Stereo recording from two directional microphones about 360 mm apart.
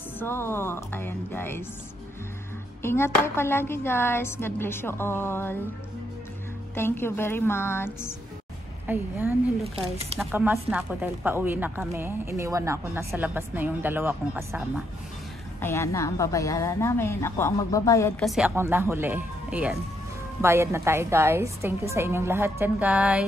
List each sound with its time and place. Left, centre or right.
0.2 s a woman's voice: centre
2.8 s a woman's voice: centre
6.7 s a woman's voice: centre
8.8 s speech: centre
9.8 s a woman's voice: centre
10.1 s speech: centre
15.6 s a woman's voice: centre